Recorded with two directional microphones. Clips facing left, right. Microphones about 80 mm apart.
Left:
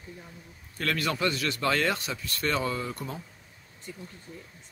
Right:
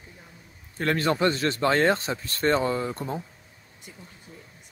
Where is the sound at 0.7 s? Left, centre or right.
Right.